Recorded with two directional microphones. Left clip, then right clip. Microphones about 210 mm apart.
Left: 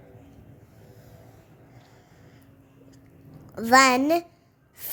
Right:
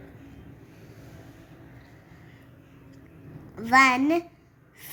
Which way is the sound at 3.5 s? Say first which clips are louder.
Left 2 dB; 65° left (ahead or behind).